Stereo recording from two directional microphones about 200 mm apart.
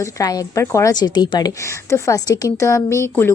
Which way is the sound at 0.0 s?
15° left (ahead or behind).